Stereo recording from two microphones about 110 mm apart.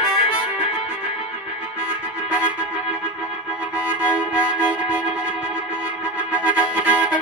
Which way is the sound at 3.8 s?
15° right (ahead or behind).